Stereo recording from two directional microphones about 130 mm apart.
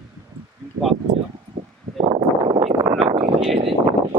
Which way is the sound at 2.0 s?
40° right (ahead or behind).